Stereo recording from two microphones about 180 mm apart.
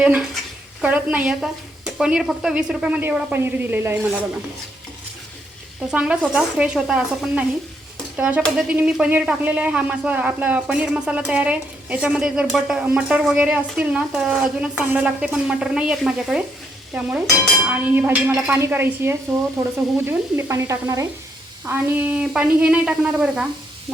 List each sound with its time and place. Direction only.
0.0 s a man's voice: 5° right (ahead or behind)
5.9 s a man's voice: 5° right (ahead or behind)
8.4 s a man's voice: 5° left (ahead or behind)